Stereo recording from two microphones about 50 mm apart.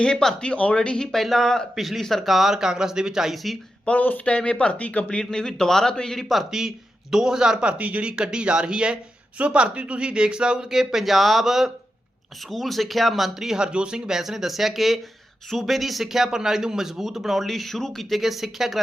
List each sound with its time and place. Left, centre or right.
0.0 s speech: centre
1.7 s speech: centre
3.3 s a man's voice: centre
3.8 s speech: left
5.2 s speech: centre
6.5 s a man's voice: centre